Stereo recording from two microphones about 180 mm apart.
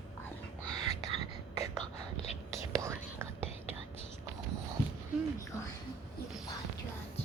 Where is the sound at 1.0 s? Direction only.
25° right (ahead or behind).